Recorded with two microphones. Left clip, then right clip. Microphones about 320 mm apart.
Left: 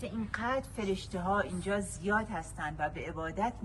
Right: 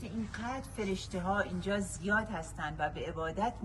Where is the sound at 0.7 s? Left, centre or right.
Centre.